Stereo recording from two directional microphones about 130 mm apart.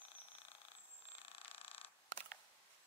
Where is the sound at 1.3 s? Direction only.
45° left (ahead or behind).